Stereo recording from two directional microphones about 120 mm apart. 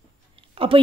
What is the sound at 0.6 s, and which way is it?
Speech, 50° right (ahead or behind).